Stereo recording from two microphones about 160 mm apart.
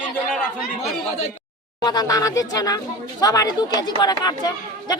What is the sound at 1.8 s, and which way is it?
Speech, 25° left (ahead or behind).